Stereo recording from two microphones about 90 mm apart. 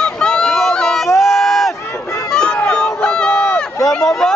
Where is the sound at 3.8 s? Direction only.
5° left (ahead or behind).